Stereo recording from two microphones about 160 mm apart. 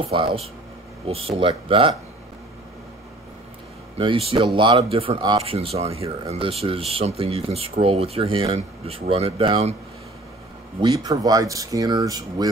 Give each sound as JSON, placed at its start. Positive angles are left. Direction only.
{"t": 0.1, "sound": "speech", "side_deg": -35}
{"t": 3.9, "sound": "speech", "side_deg": -35}
{"t": 10.8, "sound": "speech", "side_deg": -25}